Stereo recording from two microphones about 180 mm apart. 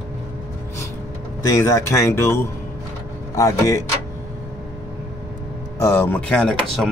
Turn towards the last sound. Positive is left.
turn(degrees=5)  # may be behind; listen again after turning